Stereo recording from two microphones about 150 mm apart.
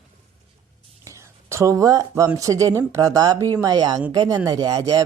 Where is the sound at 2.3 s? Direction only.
20° right (ahead or behind).